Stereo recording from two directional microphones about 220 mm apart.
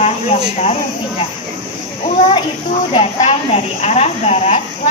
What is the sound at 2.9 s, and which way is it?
A woman's voice, 30° left (ahead or behind).